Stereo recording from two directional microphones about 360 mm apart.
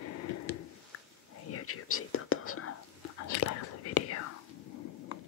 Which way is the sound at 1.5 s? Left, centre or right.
Left.